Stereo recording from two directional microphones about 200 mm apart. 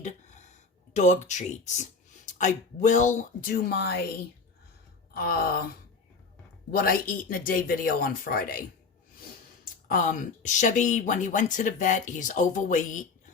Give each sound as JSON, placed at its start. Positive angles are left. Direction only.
{"t": 0.9, "sound": "speech", "side_deg": 35}
{"t": 5.1, "sound": "speech", "side_deg": 50}
{"t": 6.7, "sound": "speech", "side_deg": 45}
{"t": 9.9, "sound": "speech", "side_deg": 40}